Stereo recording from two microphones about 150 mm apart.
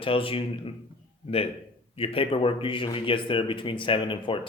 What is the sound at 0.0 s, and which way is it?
Speech, 35° left (ahead or behind).